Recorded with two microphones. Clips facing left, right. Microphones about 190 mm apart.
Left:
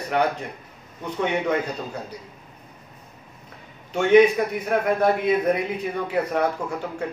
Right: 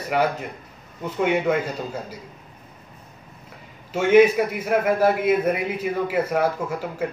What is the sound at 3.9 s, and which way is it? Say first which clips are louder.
A man's voice: even; 5° right (ahead or behind).